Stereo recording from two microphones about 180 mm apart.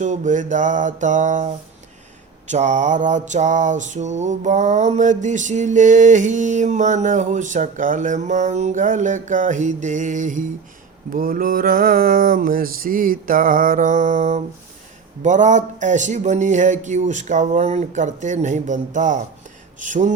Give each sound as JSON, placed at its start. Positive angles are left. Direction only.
{"t": 0.0, "sound": "mantra", "side_deg": -40}